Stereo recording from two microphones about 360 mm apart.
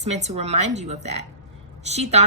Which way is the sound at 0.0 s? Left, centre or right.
Centre.